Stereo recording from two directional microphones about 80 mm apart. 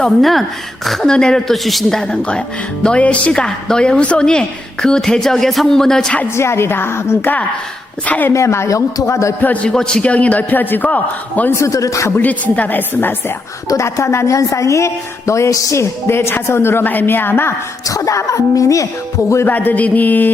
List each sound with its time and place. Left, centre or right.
0.0 s a woman's voice: centre
6.3 s a woman's voice: left
8.0 s a man's voice: centre
8.3 s a woman's voice: left
9.4 s a man's voice: centre
11.5 s a woman's voice: left
12.2 s a man's voice: centre
13.7 s a woman's voice: left
17.8 s a woman's voice: left
19.5 s a man's voice: left